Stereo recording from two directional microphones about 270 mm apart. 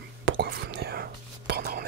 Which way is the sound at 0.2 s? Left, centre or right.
Right.